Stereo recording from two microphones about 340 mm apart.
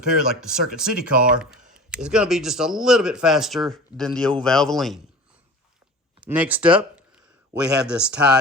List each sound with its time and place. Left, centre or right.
0.3 s speech: centre
6.1 s speech: centre